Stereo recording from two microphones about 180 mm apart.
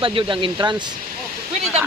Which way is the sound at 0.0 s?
30° right (ahead or behind).